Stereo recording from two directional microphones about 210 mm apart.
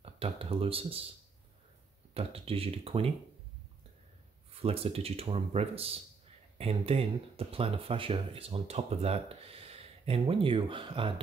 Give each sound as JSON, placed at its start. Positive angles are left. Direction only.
{"t": 0.0, "sound": "a sound", "side_deg": -25}
{"t": 2.1, "sound": "speech", "side_deg": -30}
{"t": 4.6, "sound": "speech", "side_deg": -30}